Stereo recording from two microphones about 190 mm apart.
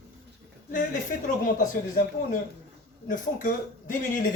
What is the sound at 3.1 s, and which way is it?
Speech, 45° left (ahead or behind).